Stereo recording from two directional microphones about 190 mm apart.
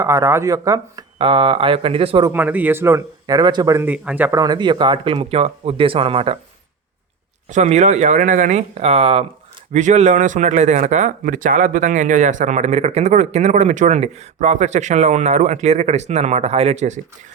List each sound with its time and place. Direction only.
0.0 s speech: 15° right (ahead or behind)
2.3 s speech: 10° right (ahead or behind); by 6.3 s 30° right (ahead or behind)
7.5 s speech: 35° right (ahead or behind)